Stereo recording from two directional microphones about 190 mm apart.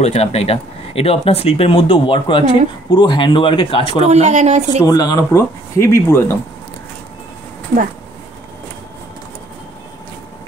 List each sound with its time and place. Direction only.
0.0 s speech: 35° left (ahead or behind)
4.0 s speech: 40° right (ahead or behind)
4.8 s speech: 20° left (ahead or behind)